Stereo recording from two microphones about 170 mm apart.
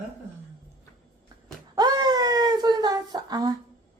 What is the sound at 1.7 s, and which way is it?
Wail, 25° right (ahead or behind).